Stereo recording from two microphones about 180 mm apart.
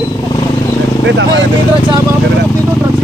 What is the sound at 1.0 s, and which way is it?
Speech, 80° right.